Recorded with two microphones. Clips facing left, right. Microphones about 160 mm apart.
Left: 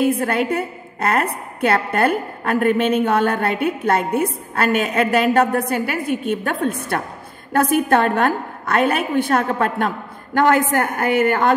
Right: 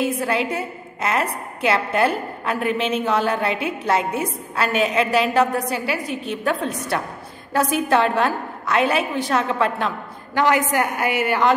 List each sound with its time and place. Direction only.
0.0 s a woman's voice: 55° left (ahead or behind)